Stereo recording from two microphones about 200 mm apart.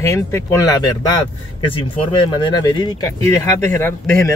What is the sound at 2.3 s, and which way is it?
Speech, 20° left (ahead or behind).